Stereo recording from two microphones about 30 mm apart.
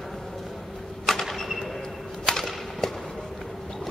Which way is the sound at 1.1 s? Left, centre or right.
Centre.